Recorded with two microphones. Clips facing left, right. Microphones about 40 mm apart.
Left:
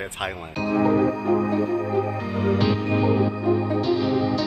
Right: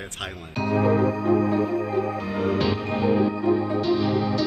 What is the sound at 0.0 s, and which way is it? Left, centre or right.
Speech, centre.